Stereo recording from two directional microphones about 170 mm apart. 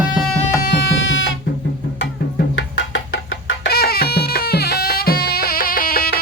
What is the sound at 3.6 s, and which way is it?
Music, 65° left (ahead or behind).